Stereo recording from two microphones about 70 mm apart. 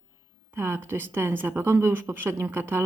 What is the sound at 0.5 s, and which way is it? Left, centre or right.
A woman's voice, right.